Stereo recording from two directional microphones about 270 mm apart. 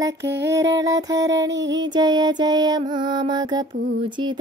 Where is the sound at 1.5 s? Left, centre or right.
Right.